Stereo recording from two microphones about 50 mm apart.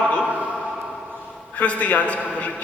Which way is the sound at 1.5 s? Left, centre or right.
Left.